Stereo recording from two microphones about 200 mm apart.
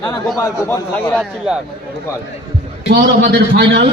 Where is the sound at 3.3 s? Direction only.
60° right (ahead or behind).